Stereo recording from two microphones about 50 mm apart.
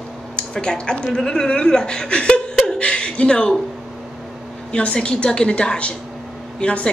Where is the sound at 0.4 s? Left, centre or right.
Centre.